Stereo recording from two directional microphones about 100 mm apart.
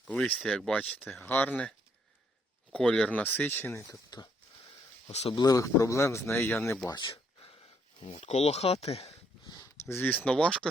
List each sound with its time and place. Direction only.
0.1 s speech: 10° left (ahead or behind)
2.7 s speech: 5° left (ahead or behind); by 3.8 s 20° left (ahead or behind)
3.8 s speech: 40° left (ahead or behind)
5.0 s speech: 90° left
5.3 s speech: 40° left (ahead or behind); by 6.5 s 25° left (ahead or behind)
6.9 s speech: 50° left (ahead or behind); by 9.1 s 90° left
9.9 s speech: 20° left (ahead or behind)
10.2 s speech: 10° left (ahead or behind)